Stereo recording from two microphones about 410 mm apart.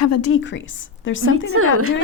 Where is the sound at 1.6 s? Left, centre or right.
Right.